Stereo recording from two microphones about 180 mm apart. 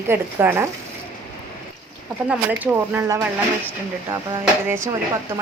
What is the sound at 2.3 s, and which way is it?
A woman's voice, 10° right (ahead or behind).